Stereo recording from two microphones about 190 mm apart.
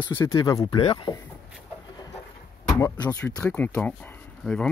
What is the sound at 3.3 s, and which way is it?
Speech, 5° left (ahead or behind).